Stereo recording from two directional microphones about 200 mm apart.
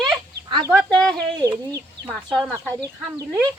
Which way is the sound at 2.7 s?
20° right (ahead or behind).